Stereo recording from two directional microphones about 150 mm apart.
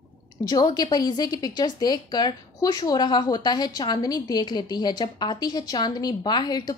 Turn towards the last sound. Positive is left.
turn(degrees=25)  # may be behind; listen again after turning